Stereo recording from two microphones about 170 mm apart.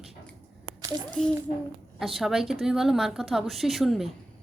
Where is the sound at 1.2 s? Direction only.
5° left (ahead or behind).